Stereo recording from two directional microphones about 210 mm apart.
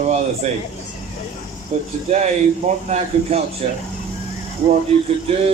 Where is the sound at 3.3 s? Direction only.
30° right (ahead or behind).